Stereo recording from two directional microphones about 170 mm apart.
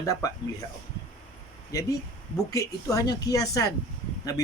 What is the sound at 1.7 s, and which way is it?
A man's voice, 20° left (ahead or behind).